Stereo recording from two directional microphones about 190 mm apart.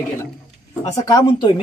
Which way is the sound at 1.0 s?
20° left (ahead or behind).